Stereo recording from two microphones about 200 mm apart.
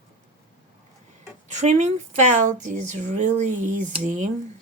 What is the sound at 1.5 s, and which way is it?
A woman's voice, 35° right (ahead or behind).